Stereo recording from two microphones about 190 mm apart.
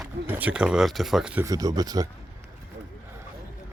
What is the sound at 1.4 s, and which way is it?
Speech, 20° right (ahead or behind).